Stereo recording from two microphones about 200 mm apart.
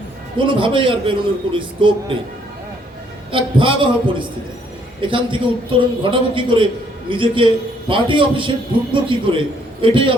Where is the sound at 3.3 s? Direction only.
25° right (ahead or behind).